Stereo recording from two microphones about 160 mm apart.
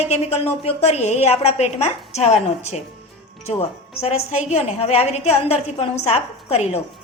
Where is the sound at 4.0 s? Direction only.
40° left (ahead or behind).